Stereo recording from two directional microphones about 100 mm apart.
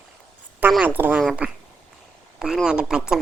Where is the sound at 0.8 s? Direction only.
15° right (ahead or behind).